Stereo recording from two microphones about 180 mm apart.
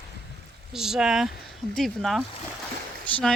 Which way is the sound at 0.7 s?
5° right (ahead or behind).